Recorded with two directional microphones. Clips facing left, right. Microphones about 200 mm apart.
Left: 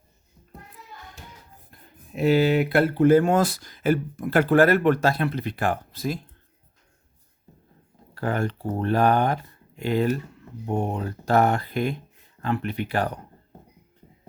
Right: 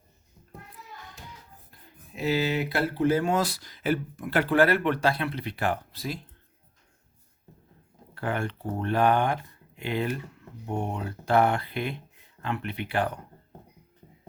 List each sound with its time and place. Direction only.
2.1 s speech: 55° left (ahead or behind)
8.1 s speech: 40° left (ahead or behind)